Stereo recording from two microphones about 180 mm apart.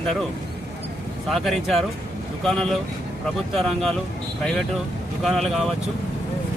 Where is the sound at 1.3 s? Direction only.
Centre (ahead or behind).